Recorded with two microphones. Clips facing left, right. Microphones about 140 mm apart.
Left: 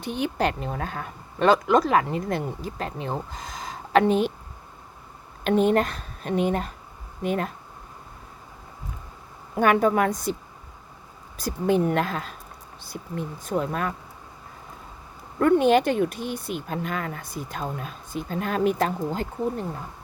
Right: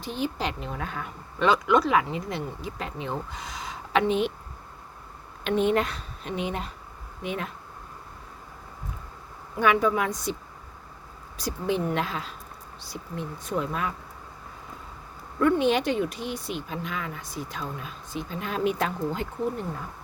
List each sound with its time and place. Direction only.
0.0 s speech: 60° left (ahead or behind); by 4.3 s 40° left (ahead or behind)
5.4 s a woman's voice: 45° left (ahead or behind)
9.6 s speech: 50° left (ahead or behind)
11.3 s speech: 50° left (ahead or behind)
15.4 s speech: 50° left (ahead or behind)